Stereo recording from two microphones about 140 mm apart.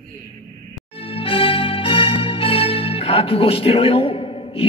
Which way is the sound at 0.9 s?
40° left (ahead or behind).